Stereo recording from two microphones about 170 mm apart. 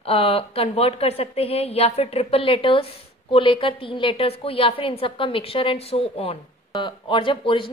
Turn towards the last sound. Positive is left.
turn(degrees=30)  # may be behind; listen again after turning